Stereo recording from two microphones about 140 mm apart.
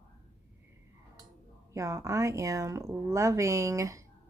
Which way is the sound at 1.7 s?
20° right (ahead or behind).